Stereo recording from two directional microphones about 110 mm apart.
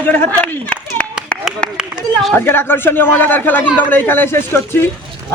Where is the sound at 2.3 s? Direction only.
20° left (ahead or behind).